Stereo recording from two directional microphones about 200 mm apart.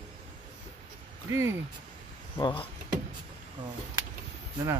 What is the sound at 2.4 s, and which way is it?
Speech, 25° left (ahead or behind).